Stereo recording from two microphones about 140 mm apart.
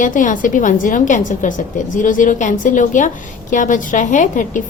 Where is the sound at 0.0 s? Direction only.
70° left (ahead or behind).